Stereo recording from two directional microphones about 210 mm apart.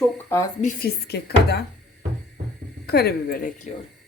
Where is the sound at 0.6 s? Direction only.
40° left (ahead or behind).